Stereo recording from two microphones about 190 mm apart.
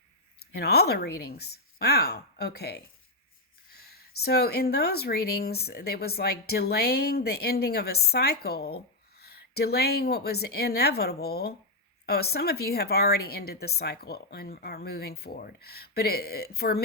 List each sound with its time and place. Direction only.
0.5 s speech: 55° left (ahead or behind)